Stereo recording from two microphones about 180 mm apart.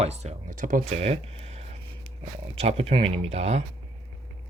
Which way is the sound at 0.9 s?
35° right (ahead or behind).